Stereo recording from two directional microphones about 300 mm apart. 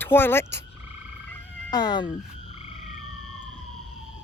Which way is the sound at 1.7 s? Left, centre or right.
Centre.